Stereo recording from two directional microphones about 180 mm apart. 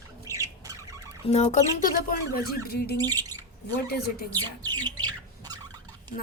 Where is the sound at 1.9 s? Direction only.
55° left (ahead or behind).